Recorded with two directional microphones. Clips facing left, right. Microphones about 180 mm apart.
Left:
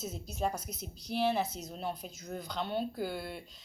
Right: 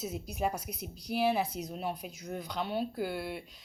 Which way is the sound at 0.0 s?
10° right (ahead or behind).